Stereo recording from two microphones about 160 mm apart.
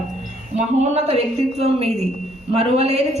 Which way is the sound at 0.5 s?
45° right (ahead or behind).